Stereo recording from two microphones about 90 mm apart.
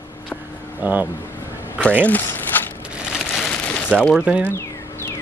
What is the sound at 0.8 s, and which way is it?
Speech, 20° right (ahead or behind).